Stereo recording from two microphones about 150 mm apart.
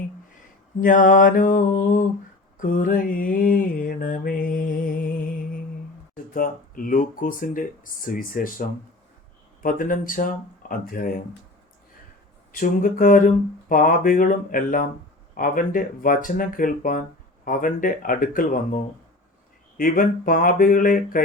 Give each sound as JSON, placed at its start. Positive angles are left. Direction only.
{"t": 0.8, "sound": "speech", "side_deg": 60}
{"t": 2.6, "sound": "mantra", "side_deg": 65}
{"t": 6.3, "sound": "speech", "side_deg": 65}
{"t": 9.6, "sound": "speech", "side_deg": 65}
{"t": 12.5, "sound": "speech", "side_deg": 65}